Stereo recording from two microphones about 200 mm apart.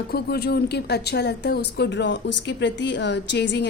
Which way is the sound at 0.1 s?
55° left (ahead or behind).